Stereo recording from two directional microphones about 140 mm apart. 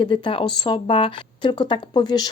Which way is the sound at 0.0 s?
35° left (ahead or behind).